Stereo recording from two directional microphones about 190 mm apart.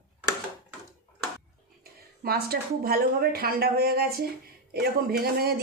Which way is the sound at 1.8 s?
55° right (ahead or behind).